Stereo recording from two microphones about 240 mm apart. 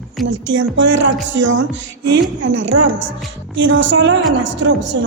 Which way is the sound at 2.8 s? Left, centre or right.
Right.